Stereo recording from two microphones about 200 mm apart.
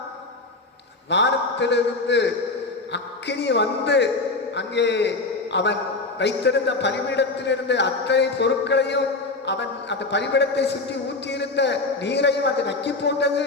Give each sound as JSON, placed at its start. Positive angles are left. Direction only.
{"t": 1.1, "sound": "a man's voice", "side_deg": 60}